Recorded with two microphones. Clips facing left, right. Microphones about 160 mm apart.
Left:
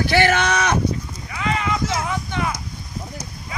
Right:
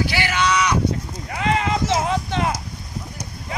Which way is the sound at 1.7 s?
30° right (ahead or behind).